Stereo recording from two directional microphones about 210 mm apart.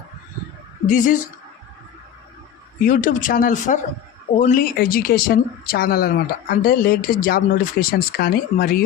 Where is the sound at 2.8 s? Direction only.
40° left (ahead or behind).